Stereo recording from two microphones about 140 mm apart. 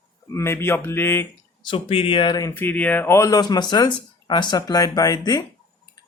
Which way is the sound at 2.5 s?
15° left (ahead or behind).